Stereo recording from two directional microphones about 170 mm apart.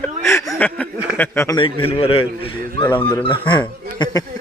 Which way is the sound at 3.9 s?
25° left (ahead or behind).